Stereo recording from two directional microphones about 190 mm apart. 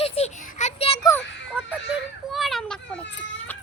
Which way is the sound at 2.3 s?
Centre (ahead or behind).